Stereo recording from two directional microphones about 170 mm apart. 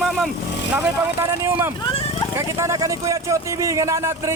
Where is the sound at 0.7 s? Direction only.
15° right (ahead or behind).